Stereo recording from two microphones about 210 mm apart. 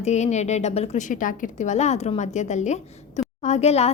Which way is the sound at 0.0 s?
35° left (ahead or behind).